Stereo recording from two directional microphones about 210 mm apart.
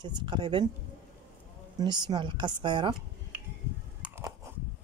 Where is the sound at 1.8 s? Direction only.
20° right (ahead or behind).